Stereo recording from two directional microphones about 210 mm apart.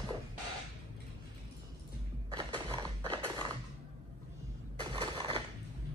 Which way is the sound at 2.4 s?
20° right (ahead or behind).